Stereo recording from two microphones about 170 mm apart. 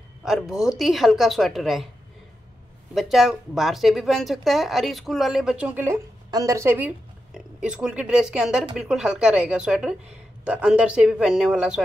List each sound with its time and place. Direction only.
0.2 s speech: centre (ahead or behind)
2.9 s speech: centre (ahead or behind)